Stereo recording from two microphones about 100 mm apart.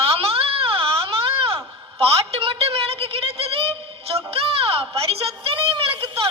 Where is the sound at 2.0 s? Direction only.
70° right (ahead or behind).